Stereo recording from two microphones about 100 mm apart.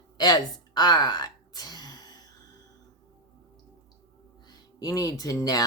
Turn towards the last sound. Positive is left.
turn(degrees=40)  # may be behind; listen again after turning